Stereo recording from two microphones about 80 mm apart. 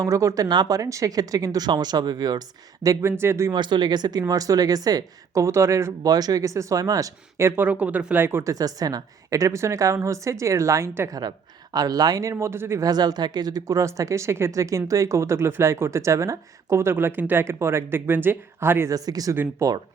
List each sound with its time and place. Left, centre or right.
0.0 s speech: right
0.4 s speech: right
3.0 s speech: right
3.5 s speech: right
6.1 s speech: right
7.3 s speech: right
7.7 s speech: centre
8.4 s speech: right
11.1 s speech: right
12.8 s speech: right
18.9 s speech: right
19.3 s speech: right